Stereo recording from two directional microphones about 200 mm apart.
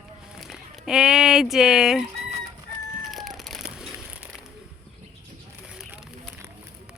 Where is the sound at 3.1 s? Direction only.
Centre (ahead or behind).